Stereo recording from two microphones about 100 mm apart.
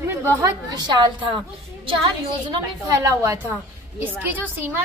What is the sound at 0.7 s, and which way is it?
Speech, 45° right (ahead or behind).